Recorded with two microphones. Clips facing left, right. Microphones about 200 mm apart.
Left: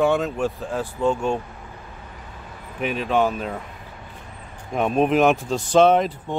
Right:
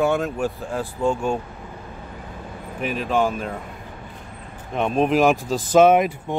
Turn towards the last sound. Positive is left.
turn(degrees=-10)  # may be behind; listen again after turning